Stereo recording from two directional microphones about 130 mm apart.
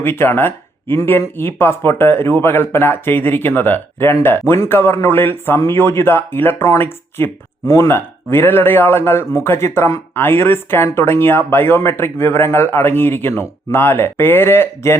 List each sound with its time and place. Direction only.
0.0 s a man's voice: 15° left (ahead or behind)